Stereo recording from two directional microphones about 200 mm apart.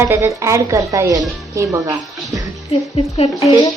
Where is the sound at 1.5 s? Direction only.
15° right (ahead or behind).